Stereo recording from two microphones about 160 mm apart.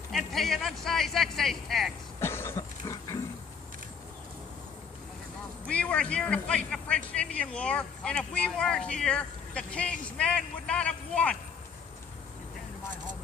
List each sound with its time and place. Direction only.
0.1 s speech: centre (ahead or behind)
2.2 s a sound: 15° left (ahead or behind)
5.6 s a man's voice: 5° left (ahead or behind)